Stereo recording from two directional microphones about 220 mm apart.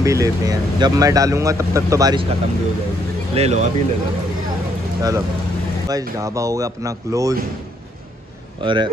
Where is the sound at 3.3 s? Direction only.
30° right (ahead or behind).